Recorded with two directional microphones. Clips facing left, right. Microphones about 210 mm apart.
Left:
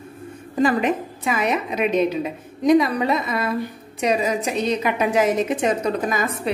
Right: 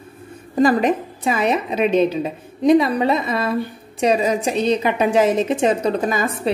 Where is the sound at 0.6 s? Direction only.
40° right (ahead or behind).